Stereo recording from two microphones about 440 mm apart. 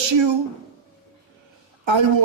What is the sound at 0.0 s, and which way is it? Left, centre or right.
Speech, right.